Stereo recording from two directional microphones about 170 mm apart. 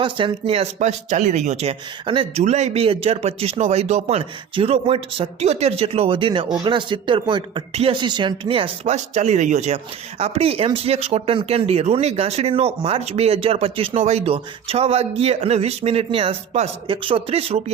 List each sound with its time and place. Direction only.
0.0 s speech: 30° right (ahead or behind)